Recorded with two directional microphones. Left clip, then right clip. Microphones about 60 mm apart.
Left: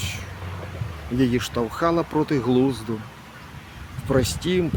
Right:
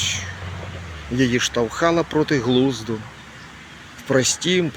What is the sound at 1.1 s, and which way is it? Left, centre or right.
Speech, left.